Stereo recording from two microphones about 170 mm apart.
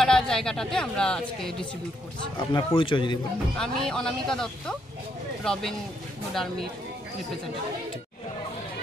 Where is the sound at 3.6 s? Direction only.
5° left (ahead or behind).